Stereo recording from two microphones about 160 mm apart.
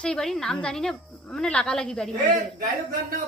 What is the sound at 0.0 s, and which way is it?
Speech, 5° left (ahead or behind).